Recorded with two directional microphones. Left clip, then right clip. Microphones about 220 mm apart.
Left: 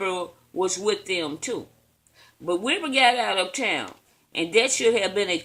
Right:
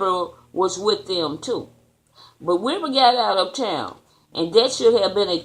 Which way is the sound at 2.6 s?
50° left (ahead or behind).